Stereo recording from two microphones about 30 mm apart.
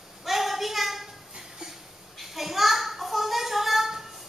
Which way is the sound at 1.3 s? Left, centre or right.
Right.